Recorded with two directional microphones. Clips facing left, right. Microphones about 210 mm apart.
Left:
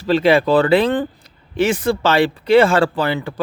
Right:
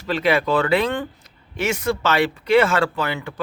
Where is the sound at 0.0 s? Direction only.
30° left (ahead or behind).